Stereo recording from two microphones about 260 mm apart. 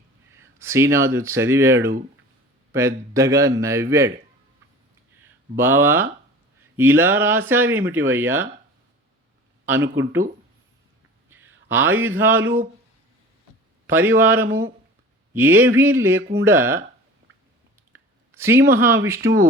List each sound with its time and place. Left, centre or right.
0.3 s speech: centre
5.5 s speech: centre
9.6 s speech: centre
11.3 s a sound: centre
11.7 s speech: right
11.9 s speech: centre
13.8 s a man's voice: centre
17.9 s a sound: centre
18.7 s speech: centre